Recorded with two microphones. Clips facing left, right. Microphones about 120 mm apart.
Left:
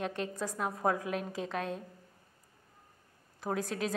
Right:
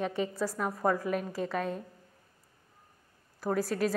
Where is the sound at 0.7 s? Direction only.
5° left (ahead or behind).